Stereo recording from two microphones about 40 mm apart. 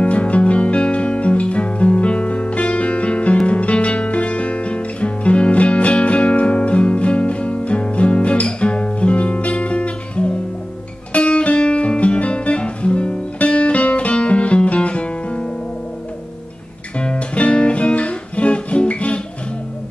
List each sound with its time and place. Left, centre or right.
0.0 s music: left
3.4 s guitar: left
11.1 s music: left
16.9 s music: left